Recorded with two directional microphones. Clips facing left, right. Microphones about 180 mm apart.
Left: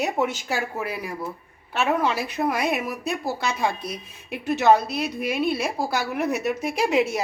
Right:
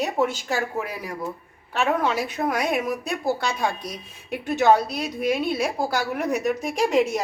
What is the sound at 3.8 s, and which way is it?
Speech, 40° right (ahead or behind).